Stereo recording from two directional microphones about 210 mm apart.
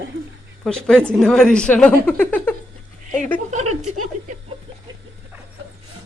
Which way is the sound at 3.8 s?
90° right.